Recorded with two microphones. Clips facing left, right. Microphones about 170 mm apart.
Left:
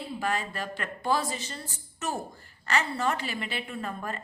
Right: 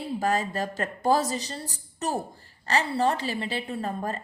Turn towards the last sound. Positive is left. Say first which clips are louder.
# right 4 dB
turn(degrees=-35)  # may be behind; listen again after turning